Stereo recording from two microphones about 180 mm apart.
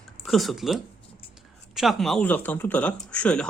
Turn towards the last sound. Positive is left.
turn(degrees=5)  # may be behind; listen again after turning